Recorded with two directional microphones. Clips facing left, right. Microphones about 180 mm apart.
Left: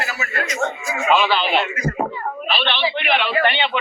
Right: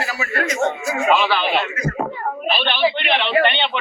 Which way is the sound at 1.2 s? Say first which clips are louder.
Even; 10° left (ahead or behind).